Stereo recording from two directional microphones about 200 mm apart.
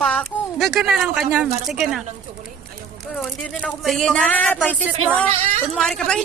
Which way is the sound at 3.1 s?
5° left (ahead or behind).